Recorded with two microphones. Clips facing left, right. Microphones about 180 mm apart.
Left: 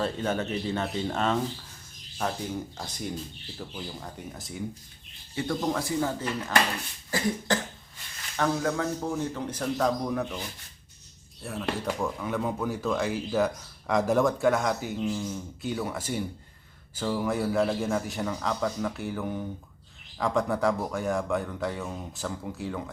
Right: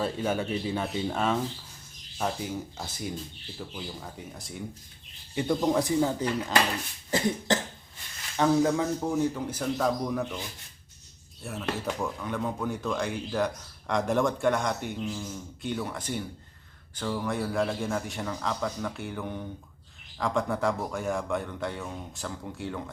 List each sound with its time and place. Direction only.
0.0 s a man's voice: 10° right (ahead or behind)
5.3 s speech: 20° right (ahead or behind)
7.1 s cough: 20° right (ahead or behind)
8.4 s speech: 15° right (ahead or behind); by 10.4 s centre (ahead or behind)
11.4 s a man's voice: centre (ahead or behind)